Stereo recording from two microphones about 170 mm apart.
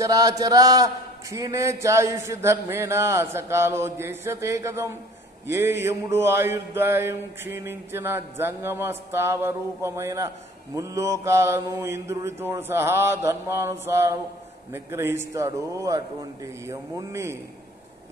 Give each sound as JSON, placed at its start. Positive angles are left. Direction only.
{"t": 0.0, "sound": "mantra", "side_deg": -20}